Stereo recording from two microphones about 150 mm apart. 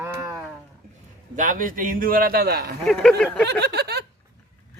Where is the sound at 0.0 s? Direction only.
15° right (ahead or behind).